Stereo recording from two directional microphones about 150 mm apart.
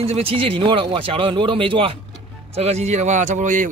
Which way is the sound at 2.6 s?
45° right (ahead or behind).